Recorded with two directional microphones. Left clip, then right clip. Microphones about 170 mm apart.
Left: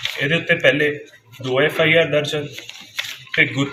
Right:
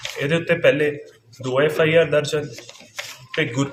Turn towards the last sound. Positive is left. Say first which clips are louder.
# left 5 dB
turn(degrees=-15)  # may be behind; listen again after turning